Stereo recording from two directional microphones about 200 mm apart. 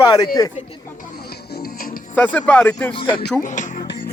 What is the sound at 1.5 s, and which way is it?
Music, 45° left (ahead or behind).